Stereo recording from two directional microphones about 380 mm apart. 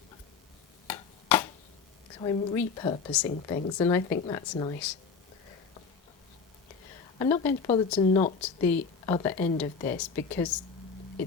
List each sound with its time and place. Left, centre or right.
0.9 s a sound: centre
2.2 s speech: centre
7.2 s speech: centre